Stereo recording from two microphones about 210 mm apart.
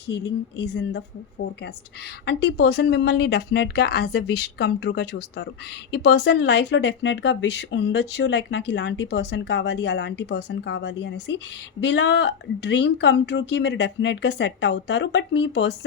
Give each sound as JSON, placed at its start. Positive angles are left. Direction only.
{"t": 0.1, "sound": "speech", "side_deg": 55}